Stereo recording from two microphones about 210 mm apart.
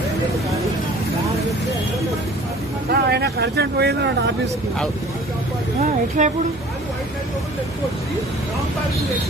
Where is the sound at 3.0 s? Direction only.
50° right (ahead or behind).